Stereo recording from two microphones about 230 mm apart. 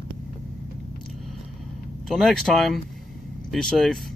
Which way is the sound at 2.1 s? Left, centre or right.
Centre.